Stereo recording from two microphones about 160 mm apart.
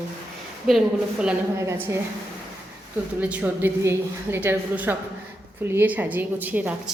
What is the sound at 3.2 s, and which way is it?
A woman's voice, 10° right (ahead or behind).